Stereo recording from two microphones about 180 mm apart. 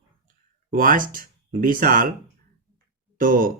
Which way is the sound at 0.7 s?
50° right (ahead or behind).